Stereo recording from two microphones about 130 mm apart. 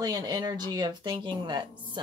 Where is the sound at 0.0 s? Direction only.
30° right (ahead or behind).